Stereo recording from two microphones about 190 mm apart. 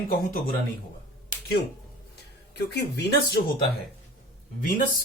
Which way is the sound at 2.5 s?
60° left (ahead or behind).